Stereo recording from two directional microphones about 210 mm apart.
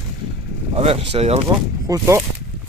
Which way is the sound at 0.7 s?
30° right (ahead or behind).